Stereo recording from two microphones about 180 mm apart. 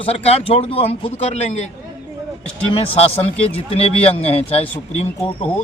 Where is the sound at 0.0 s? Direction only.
35° left (ahead or behind).